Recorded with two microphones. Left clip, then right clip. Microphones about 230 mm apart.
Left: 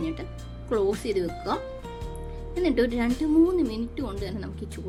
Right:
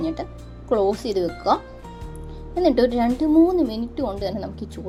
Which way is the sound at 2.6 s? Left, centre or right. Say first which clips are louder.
Right 6 dB; centre.